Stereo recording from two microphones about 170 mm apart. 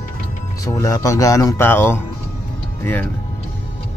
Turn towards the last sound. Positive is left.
turn(degrees=10)  # may be behind; listen again after turning